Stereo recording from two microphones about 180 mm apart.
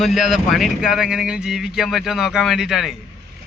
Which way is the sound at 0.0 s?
Centre (ahead or behind).